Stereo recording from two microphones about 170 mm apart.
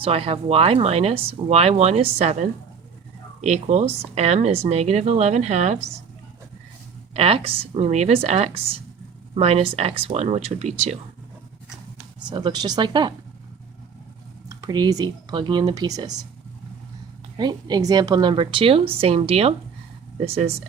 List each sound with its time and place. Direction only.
0.0 s speech: 35° right (ahead or behind)
7.1 s speech: 35° right (ahead or behind)
12.3 s a woman's voice: 25° right (ahead or behind)
14.5 s a woman's voice: 25° right (ahead or behind)
17.3 s a woman's voice: 25° right (ahead or behind)